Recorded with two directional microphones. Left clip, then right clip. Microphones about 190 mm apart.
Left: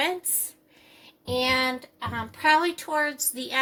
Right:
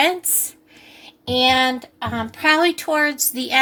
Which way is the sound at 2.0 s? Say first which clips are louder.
Right 5 dB; 45° right (ahead or behind).